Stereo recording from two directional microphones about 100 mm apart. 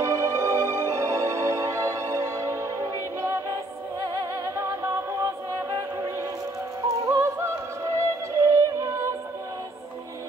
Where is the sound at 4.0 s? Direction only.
35° right (ahead or behind).